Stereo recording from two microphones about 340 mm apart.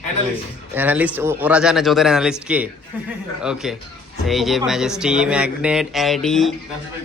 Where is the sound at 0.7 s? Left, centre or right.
Centre.